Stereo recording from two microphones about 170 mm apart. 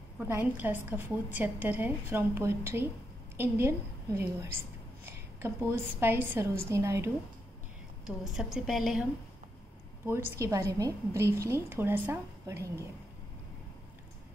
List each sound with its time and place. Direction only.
0.3 s a woman's voice: 10° right (ahead or behind)
8.2 s a woman's voice: centre (ahead or behind)
10.3 s a woman's voice: 20° right (ahead or behind)